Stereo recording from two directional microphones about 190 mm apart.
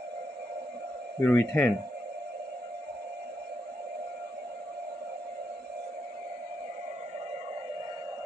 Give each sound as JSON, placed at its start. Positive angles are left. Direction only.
{"t": 1.2, "sound": "speech", "side_deg": 10}